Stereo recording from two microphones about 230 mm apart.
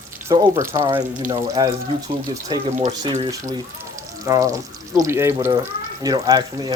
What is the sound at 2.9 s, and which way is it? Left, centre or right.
Speech, centre.